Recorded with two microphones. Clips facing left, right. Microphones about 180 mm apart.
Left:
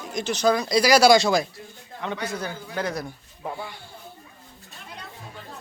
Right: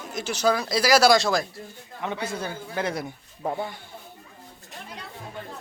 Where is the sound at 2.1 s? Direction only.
25° right (ahead or behind).